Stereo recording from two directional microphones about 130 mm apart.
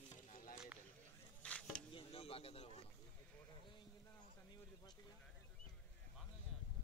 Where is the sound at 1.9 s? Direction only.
45° left (ahead or behind).